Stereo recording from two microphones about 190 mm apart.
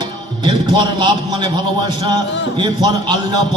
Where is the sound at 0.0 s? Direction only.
25° right (ahead or behind).